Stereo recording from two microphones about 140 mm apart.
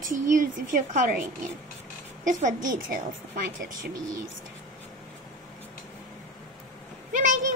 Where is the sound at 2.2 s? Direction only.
65° right (ahead or behind).